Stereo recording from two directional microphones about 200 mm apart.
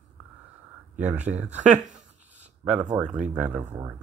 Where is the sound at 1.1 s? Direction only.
35° right (ahead or behind).